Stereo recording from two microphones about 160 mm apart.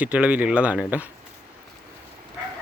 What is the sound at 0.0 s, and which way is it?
Speech, 5° right (ahead or behind).